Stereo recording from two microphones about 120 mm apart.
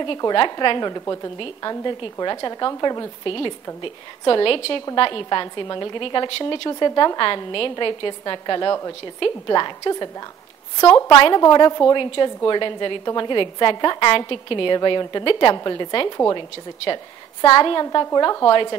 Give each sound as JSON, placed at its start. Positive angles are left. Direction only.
{"t": 0.2, "sound": "a woman's voice", "side_deg": 35}
{"t": 3.3, "sound": "a woman's voice", "side_deg": 45}
{"t": 6.7, "sound": "a woman's voice", "side_deg": 35}
{"t": 10.8, "sound": "a woman's voice", "side_deg": 25}
{"t": 11.1, "sound": "a woman's voice", "side_deg": 40}
{"t": 17.8, "sound": "a woman's voice", "side_deg": 30}